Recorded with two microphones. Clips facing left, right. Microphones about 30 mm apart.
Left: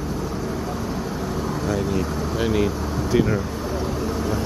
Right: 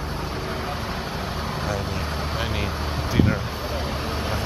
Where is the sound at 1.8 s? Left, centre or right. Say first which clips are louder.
Left 4 dB; right.